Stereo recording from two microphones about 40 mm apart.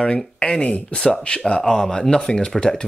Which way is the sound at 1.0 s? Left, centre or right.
Left.